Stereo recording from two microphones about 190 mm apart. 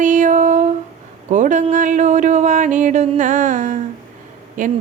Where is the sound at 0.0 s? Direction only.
40° right (ahead or behind).